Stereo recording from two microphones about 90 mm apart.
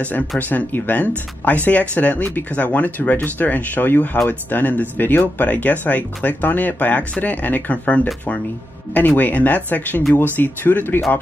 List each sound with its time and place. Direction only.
0.4 s speech: 20° left (ahead or behind)